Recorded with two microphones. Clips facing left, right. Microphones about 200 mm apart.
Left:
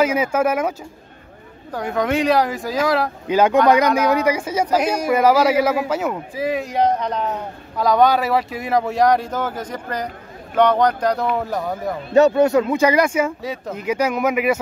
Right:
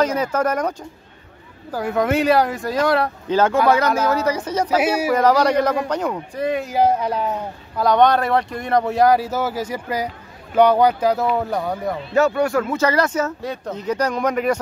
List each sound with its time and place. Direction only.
0.0 s speech: 10° left (ahead or behind)
3.3 s speech: 10° left (ahead or behind)
4.6 s speech: 5° right (ahead or behind)
5.1 s speech: 5° left (ahead or behind)
12.1 s speech: 20° left (ahead or behind)